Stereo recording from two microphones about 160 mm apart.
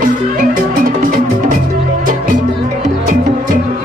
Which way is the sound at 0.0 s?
60° right (ahead or behind).